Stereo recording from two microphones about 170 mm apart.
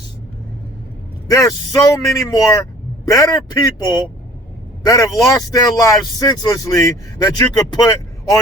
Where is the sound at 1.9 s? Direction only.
20° left (ahead or behind).